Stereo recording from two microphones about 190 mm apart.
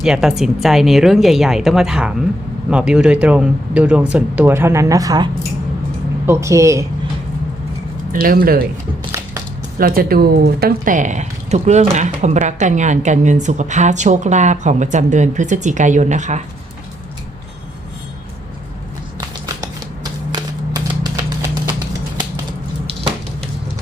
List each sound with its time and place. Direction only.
0.0 s speech: 5° right (ahead or behind)
8.1 s speech: 50° right (ahead or behind)
9.7 s speech: 50° right (ahead or behind)
20.3 s typewriter: 20° right (ahead or behind)